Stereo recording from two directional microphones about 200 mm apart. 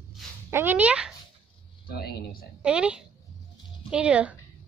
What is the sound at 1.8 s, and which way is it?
Speech, 50° left (ahead or behind).